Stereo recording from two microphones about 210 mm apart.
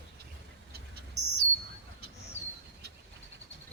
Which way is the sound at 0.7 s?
50° right (ahead or behind).